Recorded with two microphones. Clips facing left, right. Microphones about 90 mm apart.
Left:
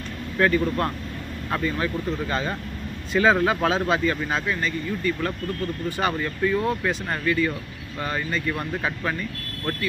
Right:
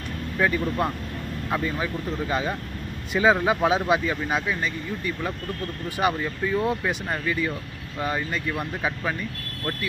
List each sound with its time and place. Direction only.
0.4 s speech: 10° right (ahead or behind)